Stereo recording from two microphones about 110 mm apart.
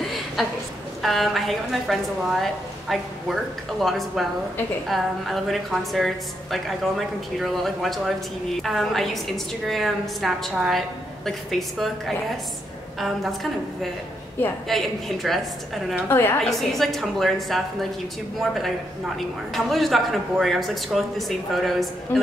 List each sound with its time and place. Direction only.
0.4 s a woman's voice: centre (ahead or behind)
13.0 s a woman's voice: centre (ahead or behind)
14.7 s a woman's voice: centre (ahead or behind)
16.1 s a woman's voice: 20° left (ahead or behind)
16.4 s a woman's voice: centre (ahead or behind)